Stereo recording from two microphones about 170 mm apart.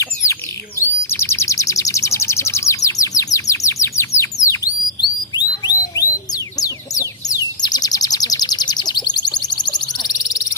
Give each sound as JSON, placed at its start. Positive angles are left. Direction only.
{"t": 0.8, "sound": "bird", "side_deg": 15}
{"t": 5.4, "sound": "a sound", "side_deg": 25}
{"t": 6.6, "sound": "chicken", "side_deg": 20}
{"t": 7.6, "sound": "bird", "side_deg": 20}